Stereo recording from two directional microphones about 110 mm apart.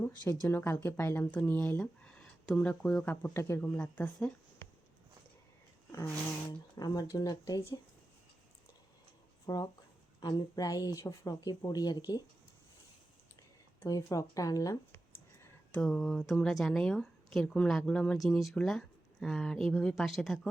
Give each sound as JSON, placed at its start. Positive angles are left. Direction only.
{"t": 0.4, "sound": "speech", "side_deg": 25}
{"t": 3.3, "sound": "speech", "side_deg": 25}
{"t": 3.7, "sound": "speech", "side_deg": 10}
{"t": 6.5, "sound": "speech", "side_deg": 40}
{"t": 9.5, "sound": "speech", "side_deg": 35}
{"t": 13.8, "sound": "speech", "side_deg": 30}
{"t": 15.7, "sound": "speech", "side_deg": 5}